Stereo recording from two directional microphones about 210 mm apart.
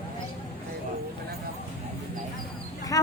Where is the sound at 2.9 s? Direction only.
15° left (ahead or behind).